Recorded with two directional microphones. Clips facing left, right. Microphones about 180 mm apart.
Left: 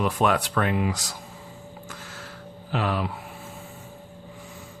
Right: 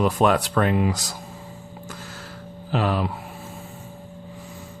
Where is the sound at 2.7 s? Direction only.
35° right (ahead or behind).